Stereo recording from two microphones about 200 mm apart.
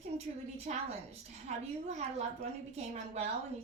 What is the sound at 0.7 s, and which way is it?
A woman's voice, 40° right (ahead or behind).